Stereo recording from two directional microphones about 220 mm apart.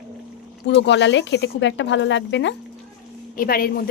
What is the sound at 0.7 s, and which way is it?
Speech, 55° left (ahead or behind).